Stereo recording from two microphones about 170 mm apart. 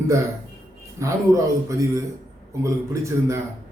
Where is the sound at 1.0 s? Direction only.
20° right (ahead or behind).